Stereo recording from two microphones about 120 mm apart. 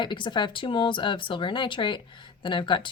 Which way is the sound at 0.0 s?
40° left (ahead or behind).